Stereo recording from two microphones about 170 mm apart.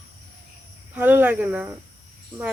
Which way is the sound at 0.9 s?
10° right (ahead or behind).